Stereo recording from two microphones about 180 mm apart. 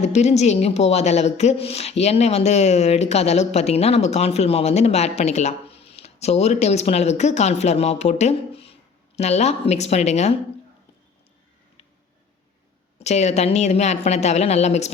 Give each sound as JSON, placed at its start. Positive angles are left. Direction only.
{"t": 0.0, "sound": "a woman's voice", "side_deg": 40}
{"t": 13.0, "sound": "a woman's voice", "side_deg": 40}